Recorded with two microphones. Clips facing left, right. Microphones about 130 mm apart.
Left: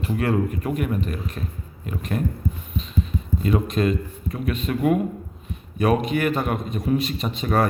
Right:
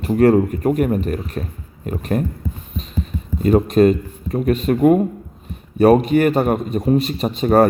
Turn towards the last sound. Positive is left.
turn(degrees=-40)  # may be behind; listen again after turning